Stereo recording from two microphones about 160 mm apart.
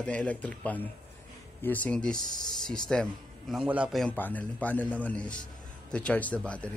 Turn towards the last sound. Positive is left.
turn(degrees=5)  # may be behind; listen again after turning